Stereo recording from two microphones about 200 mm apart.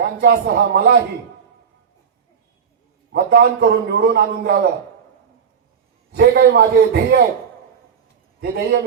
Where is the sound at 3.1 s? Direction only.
55° right (ahead or behind).